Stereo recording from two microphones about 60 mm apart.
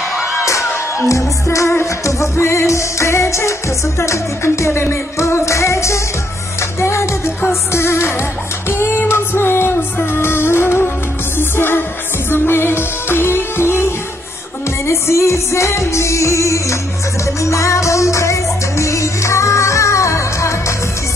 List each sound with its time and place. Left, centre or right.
0.9 s music: left